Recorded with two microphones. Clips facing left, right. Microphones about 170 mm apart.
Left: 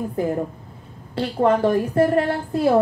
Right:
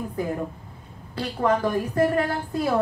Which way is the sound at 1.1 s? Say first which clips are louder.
Left 5 dB; 30° left (ahead or behind).